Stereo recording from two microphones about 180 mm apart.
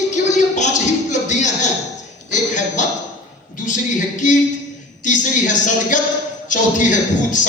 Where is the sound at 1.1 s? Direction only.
40° left (ahead or behind).